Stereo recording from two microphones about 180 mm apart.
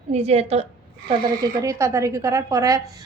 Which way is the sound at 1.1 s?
20° right (ahead or behind).